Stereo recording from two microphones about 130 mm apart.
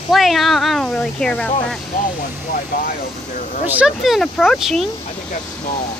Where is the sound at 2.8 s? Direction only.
80° left.